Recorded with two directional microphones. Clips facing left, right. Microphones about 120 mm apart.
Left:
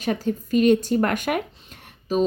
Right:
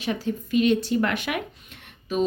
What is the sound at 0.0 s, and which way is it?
A woman's voice, 45° left (ahead or behind).